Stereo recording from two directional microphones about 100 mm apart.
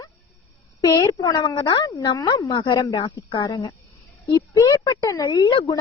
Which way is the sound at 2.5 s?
55° left (ahead or behind).